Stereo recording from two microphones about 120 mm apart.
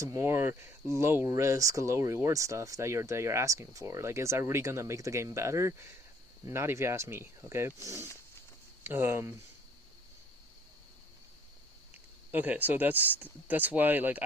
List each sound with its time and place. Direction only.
0.0 s speech: 25° right (ahead or behind)
12.3 s speech: 15° right (ahead or behind)